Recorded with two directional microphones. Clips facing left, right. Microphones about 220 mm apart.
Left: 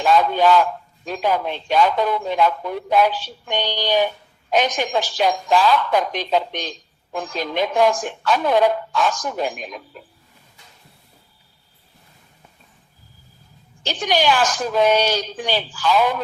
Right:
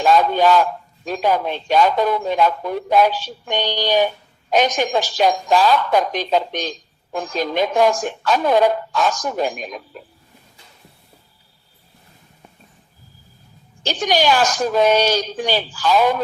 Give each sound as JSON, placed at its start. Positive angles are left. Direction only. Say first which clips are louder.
{"t": 0.0, "sound": "a sound", "louder": "right 1 dB", "side_deg": -40}
{"t": 1.0, "sound": "a man's voice", "louder": "right 2 dB", "side_deg": -40}
{"t": 13.8, "sound": "a man's voice", "louder": "right 2 dB", "side_deg": -40}